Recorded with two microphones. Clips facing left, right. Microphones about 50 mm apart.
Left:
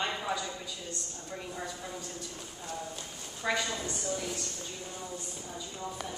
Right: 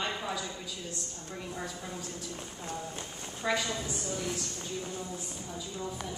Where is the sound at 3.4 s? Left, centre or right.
Centre.